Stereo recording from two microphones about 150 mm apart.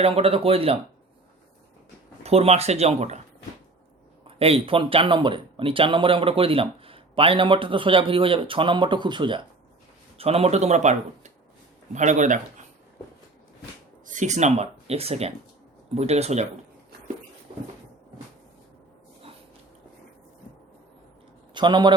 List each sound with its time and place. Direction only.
0.0 s speech: 40° right (ahead or behind)
2.2 s speech: 45° right (ahead or behind)
4.3 s speech: 40° right (ahead or behind)
10.2 s speech: 40° right (ahead or behind)
14.1 s speech: 55° right (ahead or behind)
21.5 s a man's voice: 30° right (ahead or behind)